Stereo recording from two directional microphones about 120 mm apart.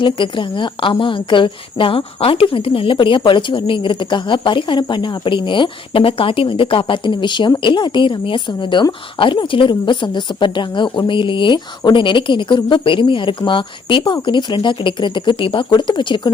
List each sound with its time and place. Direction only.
0.0 s a woman's voice: 45° left (ahead or behind)